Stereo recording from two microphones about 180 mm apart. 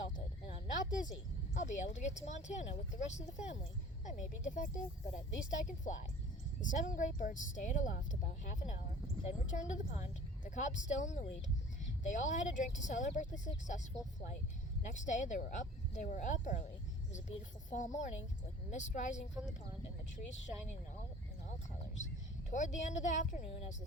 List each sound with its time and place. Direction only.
0.4 s a sound: 45° left (ahead or behind)
1.5 s speech: 40° left (ahead or behind)
22.4 s speech: 40° left (ahead or behind)